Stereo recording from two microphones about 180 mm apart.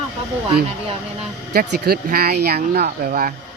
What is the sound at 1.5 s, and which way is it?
Speech, 60° right (ahead or behind).